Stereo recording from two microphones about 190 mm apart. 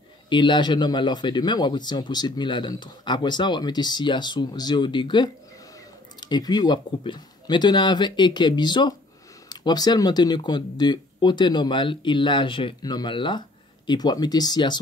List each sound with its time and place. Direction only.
0.3 s speech: 25° left (ahead or behind)